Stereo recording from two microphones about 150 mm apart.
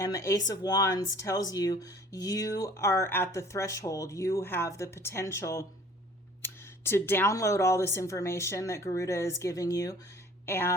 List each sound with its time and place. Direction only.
0.0 s speech: 20° left (ahead or behind)